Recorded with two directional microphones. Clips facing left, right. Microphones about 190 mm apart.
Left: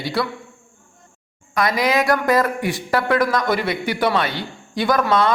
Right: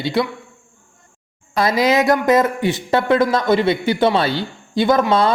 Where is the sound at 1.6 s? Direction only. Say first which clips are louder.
Right 3 dB; 25° right (ahead or behind).